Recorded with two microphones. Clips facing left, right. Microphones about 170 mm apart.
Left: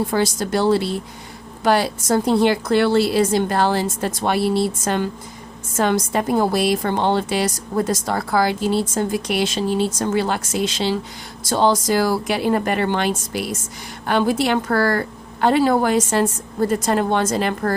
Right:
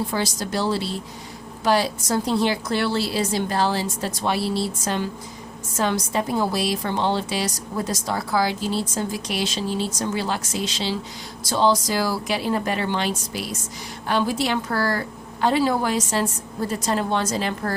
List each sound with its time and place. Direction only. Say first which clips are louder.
0.1 s a woman's voice: left 5 dB; 55° left (ahead or behind)